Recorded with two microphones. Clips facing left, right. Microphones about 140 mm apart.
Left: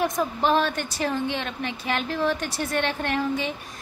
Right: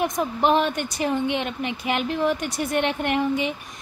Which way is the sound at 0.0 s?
20° right (ahead or behind).